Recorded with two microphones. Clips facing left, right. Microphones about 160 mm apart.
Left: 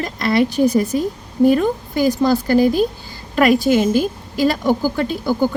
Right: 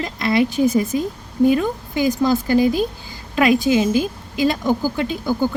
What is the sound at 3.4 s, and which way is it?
Speech, centre (ahead or behind).